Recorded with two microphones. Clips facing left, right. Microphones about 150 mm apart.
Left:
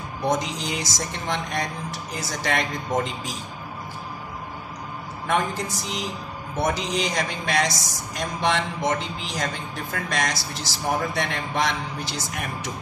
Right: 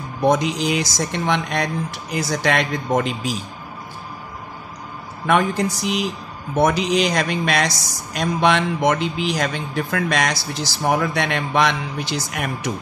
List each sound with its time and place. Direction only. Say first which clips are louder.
0.3 s speech: right 7 dB; 70° right (ahead or behind)
5.2 s a woman's voice: right 6 dB; 80° right